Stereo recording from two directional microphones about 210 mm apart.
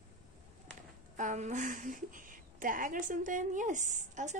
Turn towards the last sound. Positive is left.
turn(degrees=-35)  # may be behind; listen again after turning